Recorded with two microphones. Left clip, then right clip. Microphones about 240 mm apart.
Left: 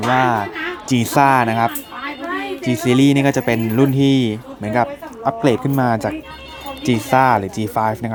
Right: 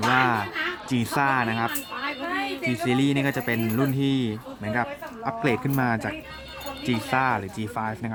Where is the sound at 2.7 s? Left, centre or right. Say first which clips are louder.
Left 10 dB; centre.